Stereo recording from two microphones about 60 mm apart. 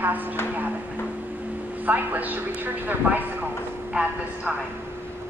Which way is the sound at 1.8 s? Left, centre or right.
Right.